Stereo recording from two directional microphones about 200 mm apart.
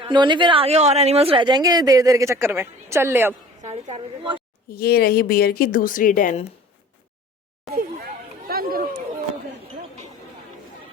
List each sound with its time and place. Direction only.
0.0 s speech: 25° right (ahead or behind)
3.6 s a woman's voice: 35° right (ahead or behind)
4.7 s a woman's voice: 50° left (ahead or behind)
8.4 s chatter: 50° right (ahead or behind)